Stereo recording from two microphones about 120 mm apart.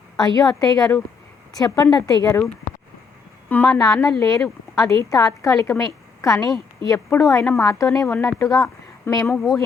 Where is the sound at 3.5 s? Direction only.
15° left (ahead or behind).